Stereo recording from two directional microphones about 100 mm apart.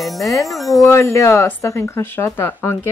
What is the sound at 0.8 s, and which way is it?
A woman's voice, 30° left (ahead or behind).